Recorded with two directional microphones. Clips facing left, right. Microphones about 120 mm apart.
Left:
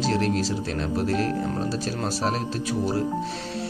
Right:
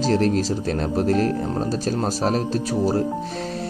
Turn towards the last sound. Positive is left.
turn(degrees=-40)  # may be behind; listen again after turning